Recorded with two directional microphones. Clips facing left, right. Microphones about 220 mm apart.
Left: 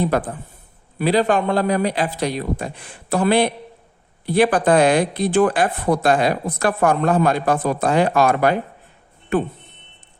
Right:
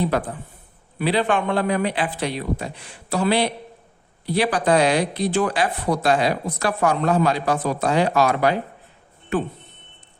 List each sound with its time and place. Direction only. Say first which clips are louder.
0.0 s speech: left 2 dB; 45° left (ahead or behind)